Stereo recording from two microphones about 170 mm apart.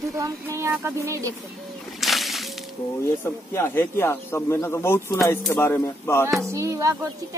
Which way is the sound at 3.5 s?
15° left (ahead or behind).